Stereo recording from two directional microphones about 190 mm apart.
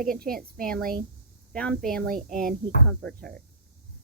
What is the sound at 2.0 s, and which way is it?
Speech, 50° right (ahead or behind).